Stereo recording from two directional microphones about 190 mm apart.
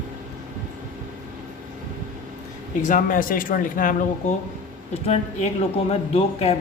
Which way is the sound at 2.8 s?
45° left (ahead or behind).